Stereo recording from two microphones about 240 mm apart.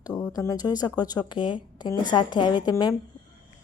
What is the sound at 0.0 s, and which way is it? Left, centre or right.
Speech, centre.